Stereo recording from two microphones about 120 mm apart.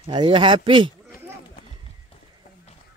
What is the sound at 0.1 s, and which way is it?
Speech, 45° right (ahead or behind).